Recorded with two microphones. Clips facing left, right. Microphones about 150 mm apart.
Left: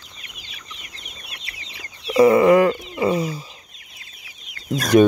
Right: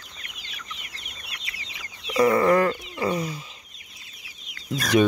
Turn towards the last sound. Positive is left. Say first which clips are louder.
# left 6 dB
turn(degrees=45)  # may be behind; listen again after turning